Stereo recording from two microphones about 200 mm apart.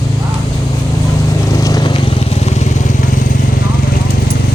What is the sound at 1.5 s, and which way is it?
Vehicle, 15° left (ahead or behind).